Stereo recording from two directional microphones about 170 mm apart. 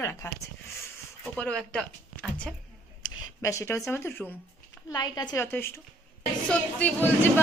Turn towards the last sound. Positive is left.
turn(degrees=10)  # may be behind; listen again after turning